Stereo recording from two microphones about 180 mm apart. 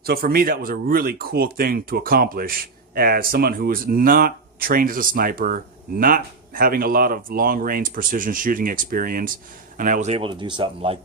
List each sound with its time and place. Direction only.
0.0 s speech: 55° right (ahead or behind); by 10.9 s 25° right (ahead or behind)